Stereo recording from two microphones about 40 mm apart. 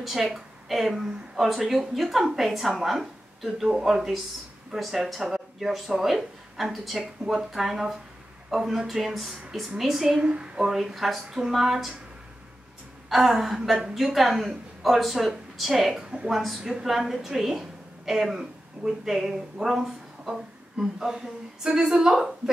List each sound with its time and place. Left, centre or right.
0.0 s a woman's voice: centre
3.6 s speech: centre
7.0 s speech: centre
10.2 s speech: right
10.7 s speech: centre
13.1 s a woman's voice: centre
20.7 s speech: centre